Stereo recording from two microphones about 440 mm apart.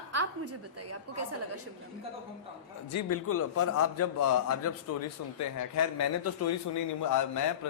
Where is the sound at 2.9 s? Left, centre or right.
Left.